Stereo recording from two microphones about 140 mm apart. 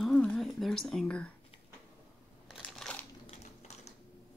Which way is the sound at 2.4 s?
Centre (ahead or behind).